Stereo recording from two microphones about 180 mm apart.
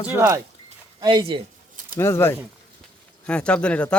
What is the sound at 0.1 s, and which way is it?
Speech, 15° right (ahead or behind).